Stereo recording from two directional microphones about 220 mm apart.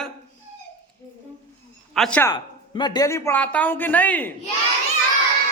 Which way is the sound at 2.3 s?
20° left (ahead or behind).